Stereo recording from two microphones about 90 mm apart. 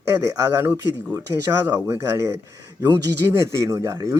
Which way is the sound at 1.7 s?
30° right (ahead or behind).